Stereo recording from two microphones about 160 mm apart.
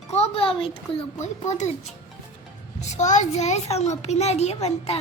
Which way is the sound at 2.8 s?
50° left (ahead or behind).